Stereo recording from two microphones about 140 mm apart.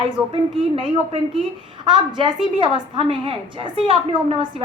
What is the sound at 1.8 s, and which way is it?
A woman's voice, 35° right (ahead or behind).